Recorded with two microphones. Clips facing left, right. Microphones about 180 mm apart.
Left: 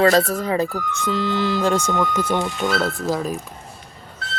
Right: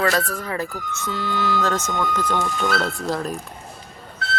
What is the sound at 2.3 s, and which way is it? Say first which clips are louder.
Speech: left 2 dB; 20° left (ahead or behind).